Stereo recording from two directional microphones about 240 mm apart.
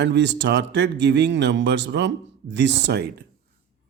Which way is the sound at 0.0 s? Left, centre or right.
Right.